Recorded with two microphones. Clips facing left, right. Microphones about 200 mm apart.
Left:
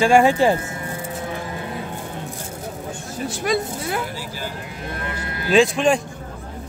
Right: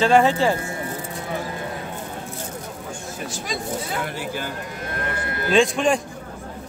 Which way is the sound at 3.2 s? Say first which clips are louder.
Left 8 dB; 60° left (ahead or behind).